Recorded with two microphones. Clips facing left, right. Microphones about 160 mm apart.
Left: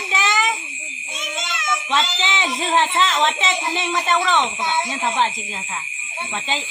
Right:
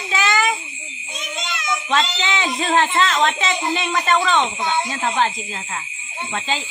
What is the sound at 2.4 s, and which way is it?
Speech, 20° left (ahead or behind).